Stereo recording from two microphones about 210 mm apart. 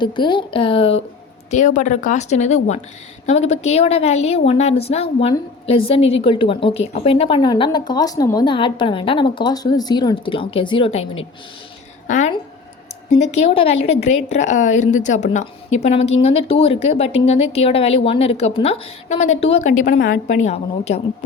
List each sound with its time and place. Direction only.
0.0 s a woman's voice: 20° left (ahead or behind)
1.5 s a woman's voice: 35° left (ahead or behind)